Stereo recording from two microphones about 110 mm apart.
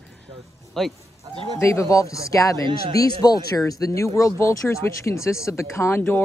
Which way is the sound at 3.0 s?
35° left (ahead or behind).